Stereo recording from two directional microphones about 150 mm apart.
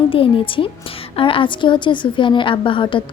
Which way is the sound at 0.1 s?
35° left (ahead or behind).